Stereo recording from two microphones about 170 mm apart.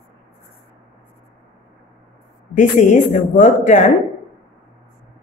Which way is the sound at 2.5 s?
45° left (ahead or behind).